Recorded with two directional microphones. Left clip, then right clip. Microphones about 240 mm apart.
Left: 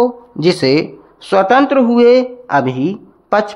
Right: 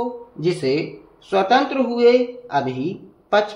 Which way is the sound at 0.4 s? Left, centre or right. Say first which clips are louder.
Left 8 dB; left.